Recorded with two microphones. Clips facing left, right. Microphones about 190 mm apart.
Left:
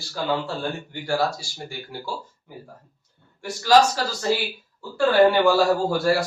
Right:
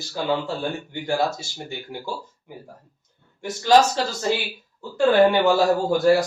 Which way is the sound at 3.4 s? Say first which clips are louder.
Right 1 dB; 20° right (ahead or behind).